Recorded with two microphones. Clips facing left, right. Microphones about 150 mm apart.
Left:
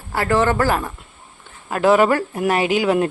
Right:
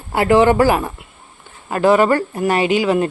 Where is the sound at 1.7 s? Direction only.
Centre (ahead or behind).